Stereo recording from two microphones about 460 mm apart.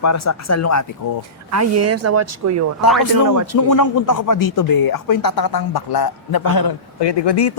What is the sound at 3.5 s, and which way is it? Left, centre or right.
Speech, left.